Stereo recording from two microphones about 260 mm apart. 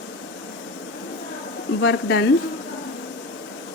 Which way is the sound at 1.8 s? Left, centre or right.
Left.